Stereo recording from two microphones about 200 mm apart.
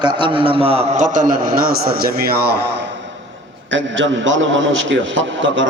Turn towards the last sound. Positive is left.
turn(degrees=-70)  # may be behind; listen again after turning